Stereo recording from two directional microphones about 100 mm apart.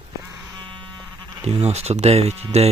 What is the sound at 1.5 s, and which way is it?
Speech, 75° right (ahead or behind).